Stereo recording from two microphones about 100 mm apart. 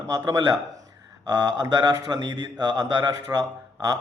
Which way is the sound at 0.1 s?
35° right (ahead or behind).